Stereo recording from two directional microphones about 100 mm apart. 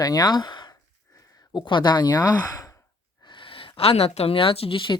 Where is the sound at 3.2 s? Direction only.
60° left (ahead or behind).